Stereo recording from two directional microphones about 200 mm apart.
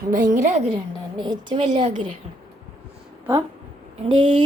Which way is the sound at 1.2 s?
25° right (ahead or behind).